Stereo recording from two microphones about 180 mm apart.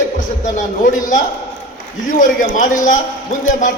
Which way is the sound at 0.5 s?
45° left (ahead or behind).